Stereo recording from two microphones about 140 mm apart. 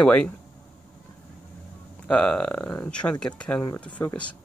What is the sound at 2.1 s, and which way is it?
Speech, 5° left (ahead or behind).